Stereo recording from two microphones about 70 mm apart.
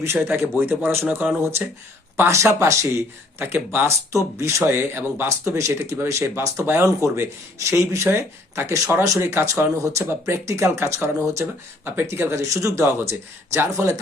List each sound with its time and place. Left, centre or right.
0.0 s speech: right
4.1 s speech: right
4.6 s speech: right
5.5 s speech: right
9.0 s speech: right
9.3 s speech: right
11.9 s speech: right